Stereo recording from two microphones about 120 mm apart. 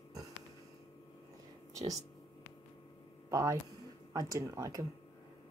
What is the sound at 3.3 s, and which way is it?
A woman's voice, 25° right (ahead or behind).